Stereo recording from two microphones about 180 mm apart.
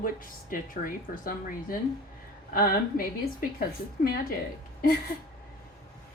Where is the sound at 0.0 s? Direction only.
50° left (ahead or behind).